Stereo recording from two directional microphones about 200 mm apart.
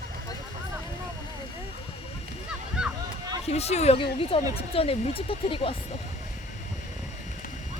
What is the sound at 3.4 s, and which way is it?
Speech, 30° left (ahead or behind).